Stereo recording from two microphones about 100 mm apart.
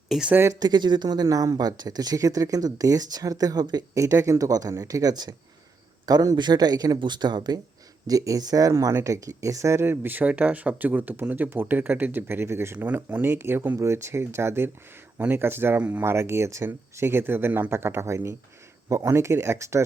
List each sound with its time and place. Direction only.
0.1 s speech: 10° right (ahead or behind)
0.6 s speech: 45° right (ahead or behind)
8.0 s speech: 35° right (ahead or behind)